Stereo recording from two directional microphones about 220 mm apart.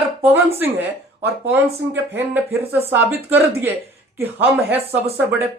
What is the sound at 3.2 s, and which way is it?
Speech, 10° right (ahead or behind).